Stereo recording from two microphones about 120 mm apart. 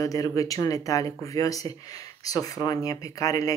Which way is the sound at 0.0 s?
30° left (ahead or behind).